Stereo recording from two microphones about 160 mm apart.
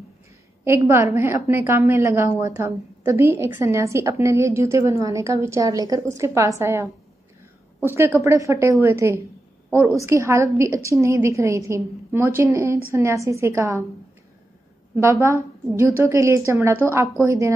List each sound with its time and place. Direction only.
0.7 s a woman's voice: 15° right (ahead or behind)
15.0 s a woman's voice: 15° right (ahead or behind)